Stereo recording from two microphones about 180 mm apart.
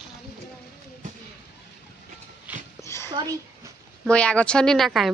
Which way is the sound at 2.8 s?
15° left (ahead or behind).